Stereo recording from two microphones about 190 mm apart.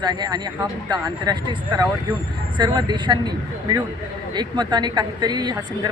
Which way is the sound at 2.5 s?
25° right (ahead or behind).